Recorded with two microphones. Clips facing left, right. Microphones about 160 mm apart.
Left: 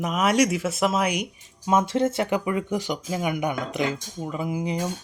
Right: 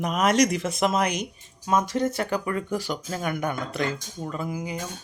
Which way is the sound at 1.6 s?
25° left (ahead or behind).